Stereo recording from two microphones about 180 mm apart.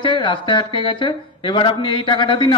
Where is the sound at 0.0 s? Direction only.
25° left (ahead or behind).